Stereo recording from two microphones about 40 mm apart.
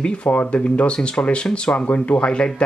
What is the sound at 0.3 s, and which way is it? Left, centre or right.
Speech, left.